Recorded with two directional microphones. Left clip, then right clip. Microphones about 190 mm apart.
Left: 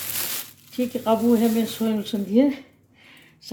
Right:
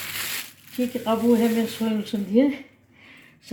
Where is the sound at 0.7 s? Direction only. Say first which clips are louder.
Left 2 dB; 20° left (ahead or behind).